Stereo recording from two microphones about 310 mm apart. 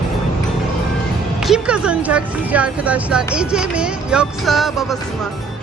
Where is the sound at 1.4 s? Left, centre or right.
Centre.